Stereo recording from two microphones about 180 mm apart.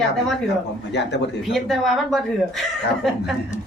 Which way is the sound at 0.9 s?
75° left (ahead or behind).